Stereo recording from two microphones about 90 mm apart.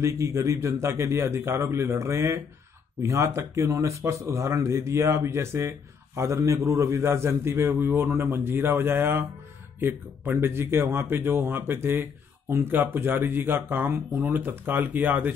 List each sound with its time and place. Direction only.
0.0 s speech: 35° right (ahead or behind); by 15.3 s 20° right (ahead or behind)